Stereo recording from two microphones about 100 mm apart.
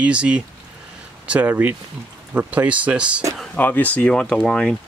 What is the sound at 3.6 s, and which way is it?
Speech, 15° left (ahead or behind).